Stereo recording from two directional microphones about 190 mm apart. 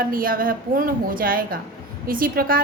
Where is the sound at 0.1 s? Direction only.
50° right (ahead or behind).